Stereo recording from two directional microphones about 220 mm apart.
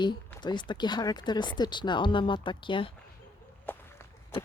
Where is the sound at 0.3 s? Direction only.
20° left (ahead or behind).